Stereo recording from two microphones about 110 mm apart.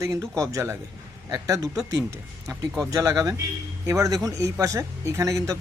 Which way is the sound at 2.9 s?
30° right (ahead or behind).